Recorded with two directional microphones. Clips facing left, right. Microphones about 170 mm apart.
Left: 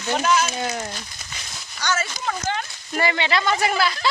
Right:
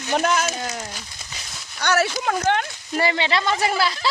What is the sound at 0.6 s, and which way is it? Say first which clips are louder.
Speech: left 3 dB; centre (ahead or behind).